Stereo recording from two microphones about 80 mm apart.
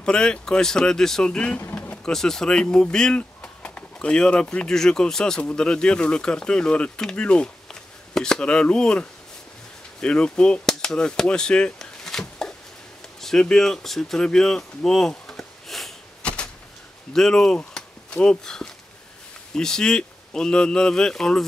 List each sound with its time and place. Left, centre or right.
0.0 s speech: centre
1.6 s vehicle: left
2.0 s speech: centre